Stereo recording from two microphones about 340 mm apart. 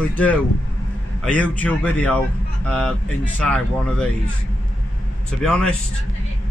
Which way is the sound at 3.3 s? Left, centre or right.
Centre.